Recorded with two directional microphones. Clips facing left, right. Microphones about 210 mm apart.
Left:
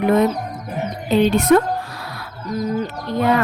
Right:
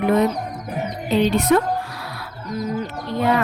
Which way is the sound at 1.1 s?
50° left (ahead or behind).